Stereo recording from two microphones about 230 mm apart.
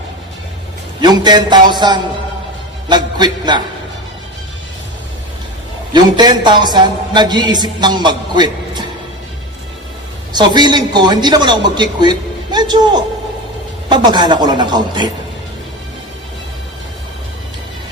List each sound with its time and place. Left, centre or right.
1.0 s a man's voice: centre
5.9 s a woman's voice: centre
10.3 s a woman's voice: centre